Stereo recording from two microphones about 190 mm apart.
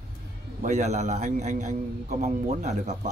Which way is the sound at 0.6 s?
35° right (ahead or behind).